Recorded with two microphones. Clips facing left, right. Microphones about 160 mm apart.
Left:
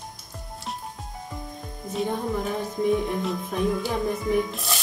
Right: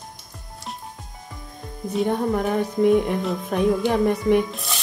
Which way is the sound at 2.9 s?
70° right (ahead or behind).